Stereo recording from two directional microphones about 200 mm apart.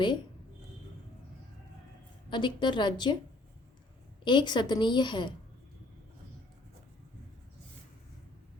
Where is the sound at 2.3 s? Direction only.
25° left (ahead or behind).